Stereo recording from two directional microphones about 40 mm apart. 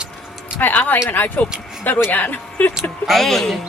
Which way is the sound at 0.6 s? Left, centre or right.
Left.